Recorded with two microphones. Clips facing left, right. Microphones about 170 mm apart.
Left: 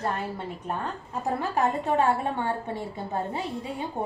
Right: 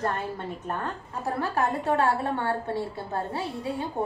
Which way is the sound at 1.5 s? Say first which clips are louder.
Left 1 dB; 20° left (ahead or behind).